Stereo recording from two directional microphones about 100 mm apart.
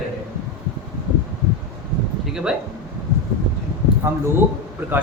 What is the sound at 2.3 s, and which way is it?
Speech, 5° right (ahead or behind).